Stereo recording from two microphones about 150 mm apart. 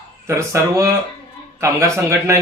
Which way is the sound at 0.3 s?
20° right (ahead or behind).